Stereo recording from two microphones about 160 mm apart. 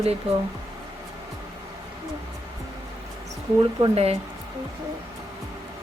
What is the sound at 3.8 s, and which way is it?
Speech, 40° right (ahead or behind).